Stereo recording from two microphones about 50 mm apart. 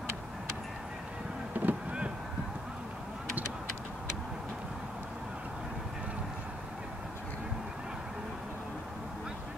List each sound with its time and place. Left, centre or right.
1.5 s boat: right